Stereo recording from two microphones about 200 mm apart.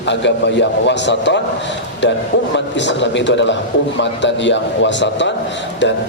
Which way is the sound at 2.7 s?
60° left (ahead or behind).